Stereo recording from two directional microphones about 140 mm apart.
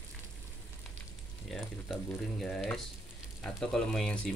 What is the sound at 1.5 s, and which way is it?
Speech, centre (ahead or behind).